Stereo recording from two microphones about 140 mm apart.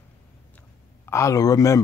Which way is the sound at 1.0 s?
20° left (ahead or behind).